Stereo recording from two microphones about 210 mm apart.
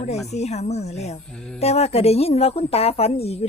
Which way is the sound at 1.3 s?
5° left (ahead or behind).